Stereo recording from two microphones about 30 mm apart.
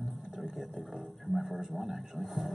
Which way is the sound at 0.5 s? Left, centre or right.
Centre.